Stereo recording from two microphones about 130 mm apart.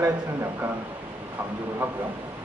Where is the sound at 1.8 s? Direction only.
15° right (ahead or behind).